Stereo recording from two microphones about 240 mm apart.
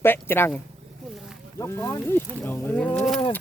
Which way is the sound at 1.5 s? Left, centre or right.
Centre.